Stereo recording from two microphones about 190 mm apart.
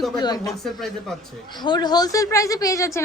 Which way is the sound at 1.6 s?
20° left (ahead or behind).